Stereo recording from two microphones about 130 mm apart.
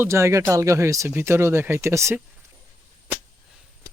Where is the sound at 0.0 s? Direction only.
20° right (ahead or behind).